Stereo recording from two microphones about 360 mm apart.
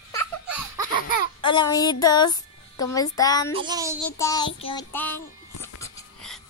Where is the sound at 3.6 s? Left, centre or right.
Centre.